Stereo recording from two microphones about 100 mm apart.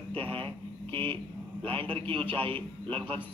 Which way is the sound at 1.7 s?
65° right (ahead or behind).